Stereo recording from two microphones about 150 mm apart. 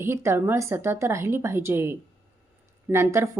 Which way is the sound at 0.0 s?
15° right (ahead or behind).